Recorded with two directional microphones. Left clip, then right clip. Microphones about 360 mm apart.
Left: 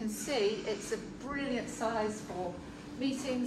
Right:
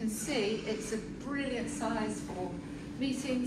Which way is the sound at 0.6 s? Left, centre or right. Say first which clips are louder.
Even; centre.